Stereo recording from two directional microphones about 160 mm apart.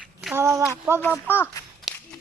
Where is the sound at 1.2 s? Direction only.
10° left (ahead or behind).